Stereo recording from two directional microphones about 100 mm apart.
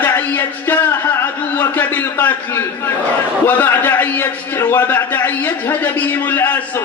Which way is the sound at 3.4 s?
20° left (ahead or behind).